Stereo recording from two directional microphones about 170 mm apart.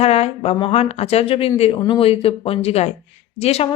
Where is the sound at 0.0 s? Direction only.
35° left (ahead or behind).